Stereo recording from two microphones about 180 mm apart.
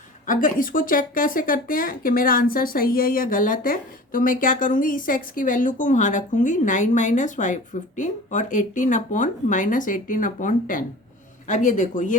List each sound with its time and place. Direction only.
0.3 s speech: 50° left (ahead or behind)